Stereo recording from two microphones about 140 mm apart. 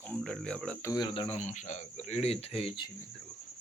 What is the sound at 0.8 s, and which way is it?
Speech, 30° left (ahead or behind).